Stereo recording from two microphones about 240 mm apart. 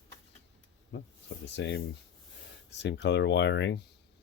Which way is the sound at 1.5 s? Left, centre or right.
Left.